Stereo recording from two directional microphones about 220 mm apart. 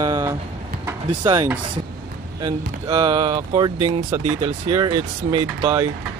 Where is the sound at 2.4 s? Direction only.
20° right (ahead or behind).